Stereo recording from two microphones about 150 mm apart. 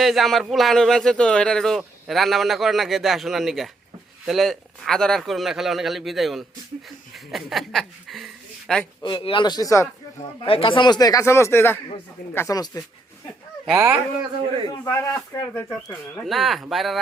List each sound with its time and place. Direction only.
0.0 s speech: centre (ahead or behind)
9.0 s speech: 35° left (ahead or behind)
10.4 s speech: 35° left (ahead or behind)
14.7 s speech: 15° left (ahead or behind)
16.2 s speech: centre (ahead or behind)